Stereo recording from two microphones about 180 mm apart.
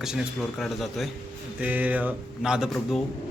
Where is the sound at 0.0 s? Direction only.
5° right (ahead or behind).